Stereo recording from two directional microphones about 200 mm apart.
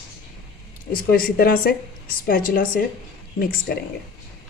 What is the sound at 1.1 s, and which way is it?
Speech, 45° left (ahead or behind).